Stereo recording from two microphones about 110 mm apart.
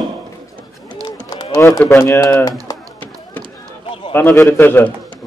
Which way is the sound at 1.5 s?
30° left (ahead or behind).